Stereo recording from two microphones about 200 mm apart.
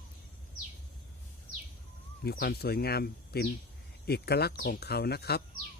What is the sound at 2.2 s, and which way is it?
Speech, 50° left (ahead or behind).